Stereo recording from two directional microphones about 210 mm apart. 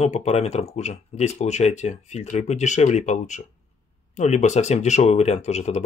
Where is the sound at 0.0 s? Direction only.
30° left (ahead or behind).